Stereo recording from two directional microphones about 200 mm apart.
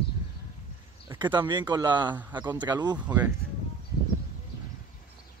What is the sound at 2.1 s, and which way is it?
Speech, 10° right (ahead or behind).